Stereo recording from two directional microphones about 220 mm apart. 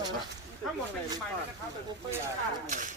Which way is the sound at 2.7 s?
35° right (ahead or behind).